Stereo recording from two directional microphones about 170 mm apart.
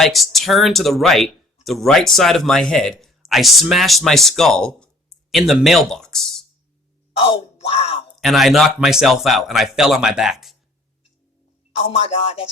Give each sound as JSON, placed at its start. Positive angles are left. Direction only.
{"t": 0.0, "sound": "speech", "side_deg": 0}
{"t": 7.3, "sound": "speech", "side_deg": 35}
{"t": 8.2, "sound": "speech", "side_deg": 0}
{"t": 11.7, "sound": "speech", "side_deg": 35}